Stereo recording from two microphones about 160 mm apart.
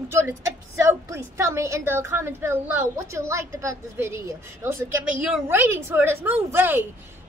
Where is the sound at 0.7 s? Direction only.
15° right (ahead or behind).